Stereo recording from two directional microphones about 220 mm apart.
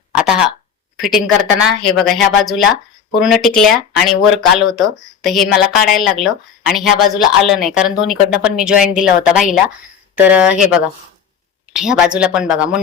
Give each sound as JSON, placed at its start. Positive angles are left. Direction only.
{"t": 1.0, "sound": "a woman's voice", "side_deg": 0}